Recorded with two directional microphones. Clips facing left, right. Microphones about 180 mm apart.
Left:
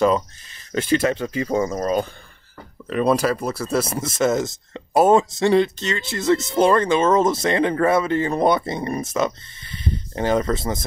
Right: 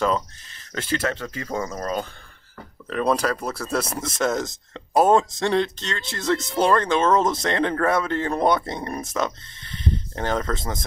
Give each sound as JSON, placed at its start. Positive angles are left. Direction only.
{"t": 0.0, "sound": "speech", "side_deg": 15}
{"t": 2.9, "sound": "speech", "side_deg": 5}